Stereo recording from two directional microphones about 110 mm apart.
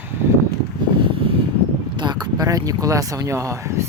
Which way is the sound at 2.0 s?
40° right (ahead or behind).